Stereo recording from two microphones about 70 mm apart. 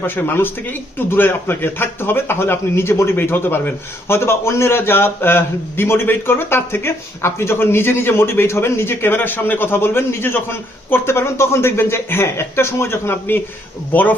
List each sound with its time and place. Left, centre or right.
0.0 s a man's voice: left
4.2 s a man's voice: left